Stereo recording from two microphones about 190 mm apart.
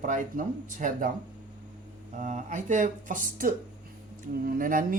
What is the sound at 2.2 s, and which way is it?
Speech, 40° right (ahead or behind).